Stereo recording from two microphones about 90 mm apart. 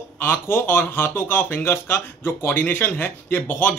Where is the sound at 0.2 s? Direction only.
25° left (ahead or behind).